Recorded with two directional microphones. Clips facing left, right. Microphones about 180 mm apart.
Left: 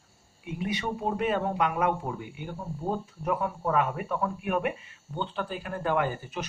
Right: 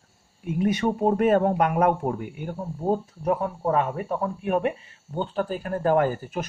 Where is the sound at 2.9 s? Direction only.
40° right (ahead or behind).